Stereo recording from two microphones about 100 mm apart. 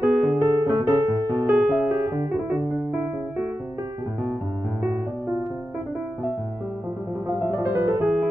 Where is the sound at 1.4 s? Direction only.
10° right (ahead or behind).